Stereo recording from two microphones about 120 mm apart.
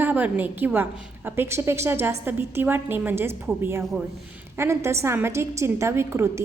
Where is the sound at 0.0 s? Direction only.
15° right (ahead or behind).